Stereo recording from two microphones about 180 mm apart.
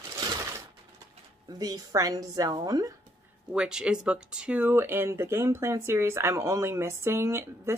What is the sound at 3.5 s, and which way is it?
Speech, 5° right (ahead or behind).